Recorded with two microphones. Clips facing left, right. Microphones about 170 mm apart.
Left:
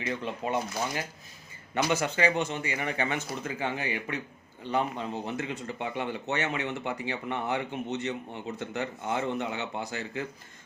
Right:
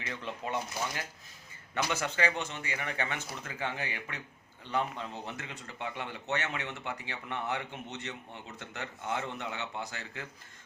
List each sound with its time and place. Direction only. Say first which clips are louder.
0.0 s speech: left 6 dB; 10° left (ahead or behind)
1.7 s speech: left 5 dB; 10° left (ahead or behind)